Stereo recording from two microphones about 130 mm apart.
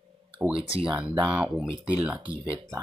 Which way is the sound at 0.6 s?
45° right (ahead or behind).